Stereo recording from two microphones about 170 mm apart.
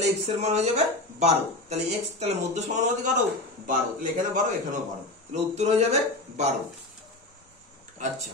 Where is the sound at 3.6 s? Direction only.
50° right (ahead or behind).